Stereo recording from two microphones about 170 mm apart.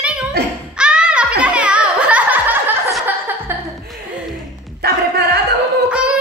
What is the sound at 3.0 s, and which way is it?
Music, 10° right (ahead or behind).